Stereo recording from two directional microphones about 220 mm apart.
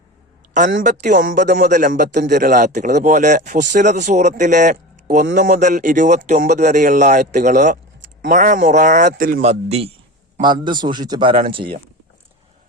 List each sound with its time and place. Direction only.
0.8 s speech: 35° right (ahead or behind)
9.5 s a man's voice: 30° right (ahead or behind)